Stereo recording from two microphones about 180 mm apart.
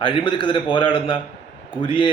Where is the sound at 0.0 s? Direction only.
30° left (ahead or behind).